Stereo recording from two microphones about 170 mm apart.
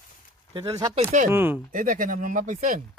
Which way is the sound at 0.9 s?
40° right (ahead or behind).